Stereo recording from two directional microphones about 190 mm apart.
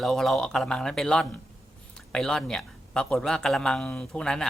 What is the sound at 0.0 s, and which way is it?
A man's voice, centre (ahead or behind).